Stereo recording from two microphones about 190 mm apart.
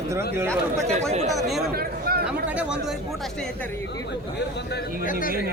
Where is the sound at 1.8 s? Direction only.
50° right (ahead or behind).